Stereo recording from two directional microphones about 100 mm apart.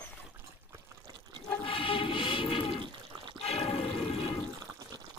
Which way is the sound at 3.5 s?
90° left.